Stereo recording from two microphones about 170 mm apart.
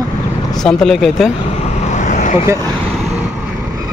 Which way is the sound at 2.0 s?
45° left (ahead or behind).